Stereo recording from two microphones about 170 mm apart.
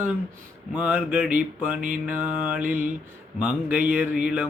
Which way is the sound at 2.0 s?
10° right (ahead or behind).